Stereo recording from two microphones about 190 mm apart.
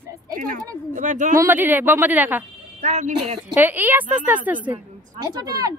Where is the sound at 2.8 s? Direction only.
40° right (ahead or behind).